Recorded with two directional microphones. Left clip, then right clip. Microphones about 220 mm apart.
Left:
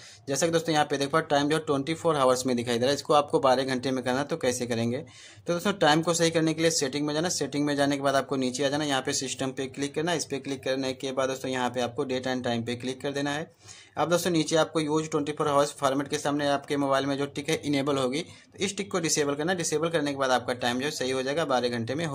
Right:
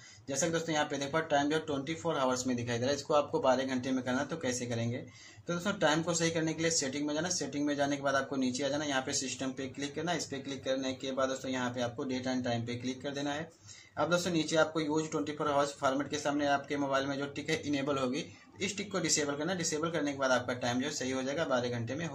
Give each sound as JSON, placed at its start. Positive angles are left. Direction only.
{"t": 0.3, "sound": "speech", "side_deg": 50}